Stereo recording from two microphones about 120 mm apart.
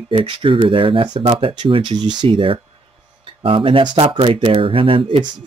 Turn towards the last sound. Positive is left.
turn(degrees=-50)  # may be behind; listen again after turning